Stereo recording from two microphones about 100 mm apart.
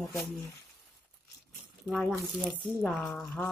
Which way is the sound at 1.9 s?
5° left (ahead or behind).